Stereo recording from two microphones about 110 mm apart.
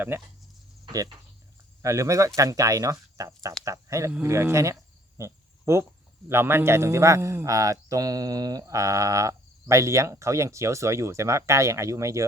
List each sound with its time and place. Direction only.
0.1 s a man's voice: 20° right (ahead or behind)
1.8 s a man's voice: 25° right (ahead or behind)